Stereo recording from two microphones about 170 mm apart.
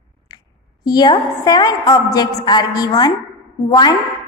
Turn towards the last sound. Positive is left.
turn(degrees=25)  # may be behind; listen again after turning